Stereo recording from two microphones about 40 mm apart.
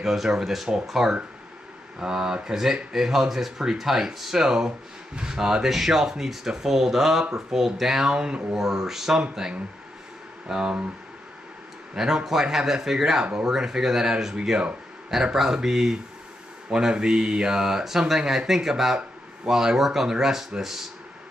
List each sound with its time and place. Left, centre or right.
0.0 s speech: centre
8.1 s speech: right
8.5 s speech: centre
10.5 s speech: right
12.0 s speech: centre